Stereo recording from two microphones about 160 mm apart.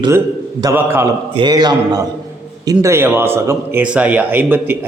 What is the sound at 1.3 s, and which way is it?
A man's voice, 30° right (ahead or behind).